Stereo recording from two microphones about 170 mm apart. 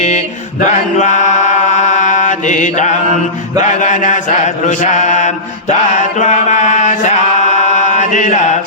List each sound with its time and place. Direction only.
0.6 s chant: 45° left (ahead or behind)
3.6 s mantra: 45° left (ahead or behind)